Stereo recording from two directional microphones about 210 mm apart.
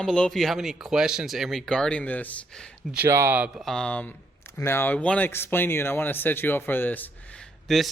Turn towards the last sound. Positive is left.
turn(degrees=0)  # may be behind; listen again after turning